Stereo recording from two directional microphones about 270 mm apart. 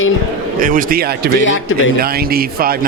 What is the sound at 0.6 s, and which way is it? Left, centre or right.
Speech, right.